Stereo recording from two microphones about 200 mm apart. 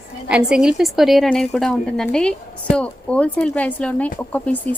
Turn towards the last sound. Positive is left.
turn(degrees=10)  # may be behind; listen again after turning